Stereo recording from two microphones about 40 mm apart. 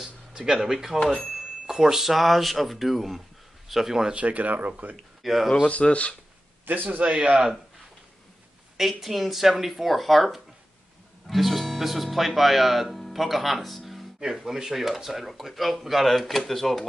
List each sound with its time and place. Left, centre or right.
0.0 s a sound: centre
0.6 s speech: centre
4.1 s speech: right
5.2 s speech: centre
5.7 s speech: left
6.6 s a man's voice: right
8.7 s speech: centre